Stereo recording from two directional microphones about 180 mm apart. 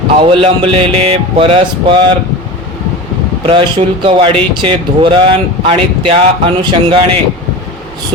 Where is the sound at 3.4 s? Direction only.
30° right (ahead or behind).